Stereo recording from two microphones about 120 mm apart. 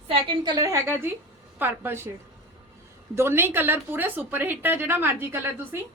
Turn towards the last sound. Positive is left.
turn(degrees=-20)  # may be behind; listen again after turning